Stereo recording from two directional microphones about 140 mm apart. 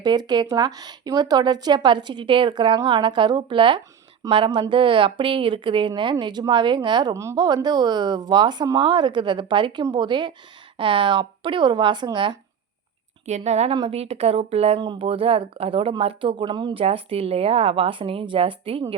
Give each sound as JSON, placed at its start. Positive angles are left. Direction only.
{"t": 0.0, "sound": "speech", "side_deg": -30}
{"t": 13.2, "sound": "a woman's voice", "side_deg": -55}
{"t": 13.7, "sound": "a woman's voice", "side_deg": -40}
{"t": 14.8, "sound": "speech", "side_deg": -35}